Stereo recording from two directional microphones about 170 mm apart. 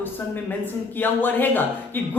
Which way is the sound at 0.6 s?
10° left (ahead or behind).